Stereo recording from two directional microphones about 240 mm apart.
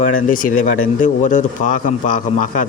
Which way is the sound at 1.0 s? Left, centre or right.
Left.